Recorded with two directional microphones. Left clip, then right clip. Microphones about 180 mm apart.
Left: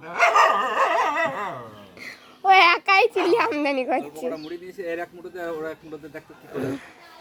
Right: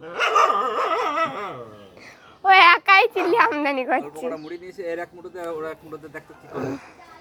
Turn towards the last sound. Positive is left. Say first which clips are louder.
# even
turn(degrees=15)  # may be behind; listen again after turning